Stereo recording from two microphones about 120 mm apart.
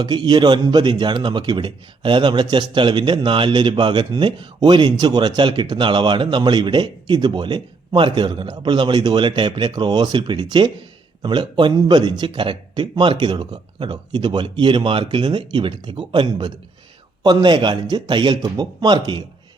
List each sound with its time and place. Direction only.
0.0 s speech: 40° right (ahead or behind)